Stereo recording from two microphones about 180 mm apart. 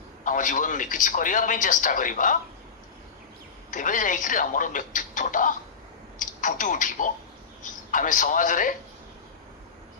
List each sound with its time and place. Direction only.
0.2 s a man's voice: 45° left (ahead or behind)
3.7 s a man's voice: 45° left (ahead or behind)